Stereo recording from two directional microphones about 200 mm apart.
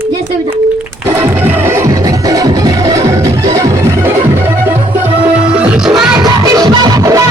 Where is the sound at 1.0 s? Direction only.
10° right (ahead or behind).